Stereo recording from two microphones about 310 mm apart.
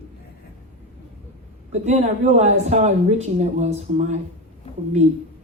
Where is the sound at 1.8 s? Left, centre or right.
Right.